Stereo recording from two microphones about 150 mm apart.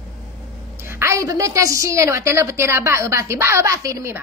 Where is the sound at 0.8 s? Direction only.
15° right (ahead or behind).